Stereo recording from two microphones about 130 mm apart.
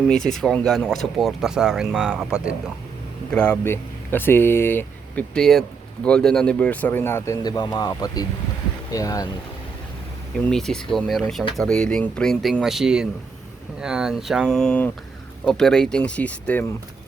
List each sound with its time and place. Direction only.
0.1 s speech: 5° left (ahead or behind)
3.3 s speech: 10° left (ahead or behind)
7.4 s speech: 30° left (ahead or behind)
10.3 s speech: 5° left (ahead or behind)